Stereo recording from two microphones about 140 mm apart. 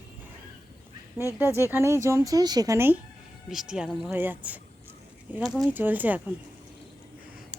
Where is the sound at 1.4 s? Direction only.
20° right (ahead or behind).